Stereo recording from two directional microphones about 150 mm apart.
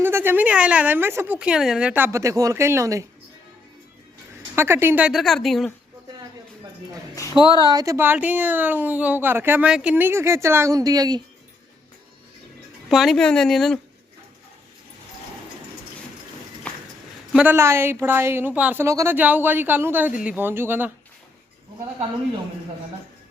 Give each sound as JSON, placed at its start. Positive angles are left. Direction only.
{"t": 0.0, "sound": "a woman's voice", "side_deg": -15}
{"t": 1.4, "sound": "a woman's voice", "side_deg": -5}
{"t": 4.5, "sound": "speech", "side_deg": -15}
{"t": 7.4, "sound": "a woman's voice", "side_deg": 25}
{"t": 7.7, "sound": "a woman's voice", "side_deg": -25}
{"t": 12.9, "sound": "speech", "side_deg": 0}
{"t": 17.3, "sound": "a woman's voice", "side_deg": -10}